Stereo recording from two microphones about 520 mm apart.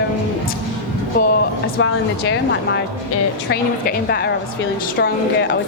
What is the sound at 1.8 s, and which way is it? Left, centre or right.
Speech, left.